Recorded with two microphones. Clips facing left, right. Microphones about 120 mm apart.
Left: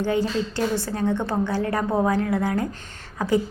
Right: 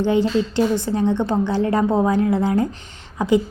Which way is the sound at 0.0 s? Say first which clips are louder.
Right 5 dB; 20° right (ahead or behind).